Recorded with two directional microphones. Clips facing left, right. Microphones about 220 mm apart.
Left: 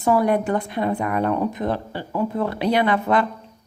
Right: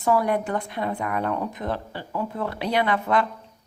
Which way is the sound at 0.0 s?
25° left (ahead or behind).